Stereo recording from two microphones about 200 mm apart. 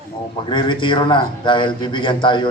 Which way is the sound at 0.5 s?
25° left (ahead or behind).